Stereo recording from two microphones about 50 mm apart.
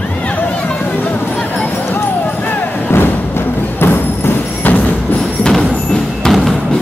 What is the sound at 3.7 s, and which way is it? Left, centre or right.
Music, left.